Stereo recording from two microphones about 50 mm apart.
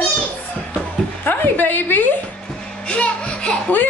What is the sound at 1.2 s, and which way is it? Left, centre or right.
Speech, left.